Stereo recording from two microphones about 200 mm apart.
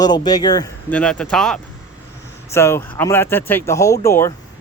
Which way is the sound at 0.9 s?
5° left (ahead or behind).